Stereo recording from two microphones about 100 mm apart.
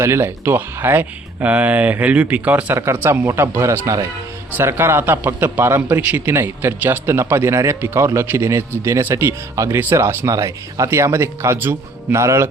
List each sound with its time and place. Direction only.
0.0 s speech: 25° right (ahead or behind)
2.7 s a man's voice: 25° right (ahead or behind)